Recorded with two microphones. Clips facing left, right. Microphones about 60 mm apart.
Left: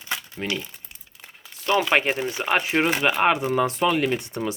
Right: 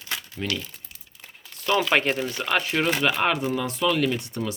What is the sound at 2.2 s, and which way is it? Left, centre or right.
Speech, left.